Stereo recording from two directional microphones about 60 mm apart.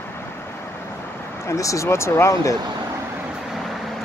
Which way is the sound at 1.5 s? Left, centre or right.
Left.